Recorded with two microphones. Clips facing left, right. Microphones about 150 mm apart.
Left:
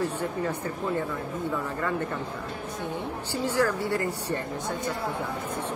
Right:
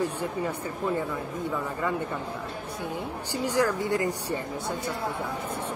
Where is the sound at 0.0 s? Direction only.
10° right (ahead or behind).